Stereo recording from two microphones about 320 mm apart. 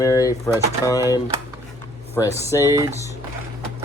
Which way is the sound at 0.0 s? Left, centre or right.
Centre.